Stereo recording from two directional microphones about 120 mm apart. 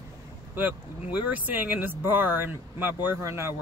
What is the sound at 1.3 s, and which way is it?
Speech, 15° right (ahead or behind).